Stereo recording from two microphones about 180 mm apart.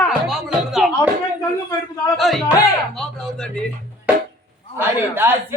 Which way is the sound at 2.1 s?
Centre (ahead or behind).